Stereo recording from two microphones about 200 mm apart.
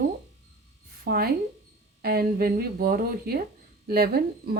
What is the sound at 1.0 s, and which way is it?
A woman's voice, 50° right (ahead or behind).